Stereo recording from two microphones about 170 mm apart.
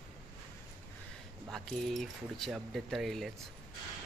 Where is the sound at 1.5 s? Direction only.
Centre (ahead or behind).